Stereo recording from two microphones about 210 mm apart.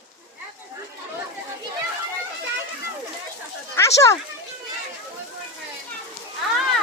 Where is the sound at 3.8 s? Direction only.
15° left (ahead or behind).